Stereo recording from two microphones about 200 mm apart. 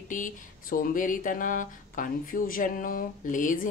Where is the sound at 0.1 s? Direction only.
40° left (ahead or behind).